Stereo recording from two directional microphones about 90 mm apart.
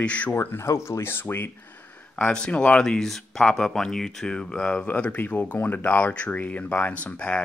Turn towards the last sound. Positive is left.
turn(degrees=15)  # may be behind; listen again after turning